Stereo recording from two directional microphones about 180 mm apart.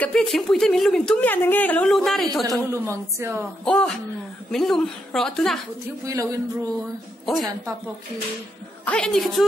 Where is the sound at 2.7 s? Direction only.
15° right (ahead or behind).